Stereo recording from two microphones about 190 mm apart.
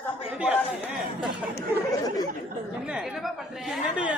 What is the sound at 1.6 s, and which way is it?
Chatter, 20° left (ahead or behind).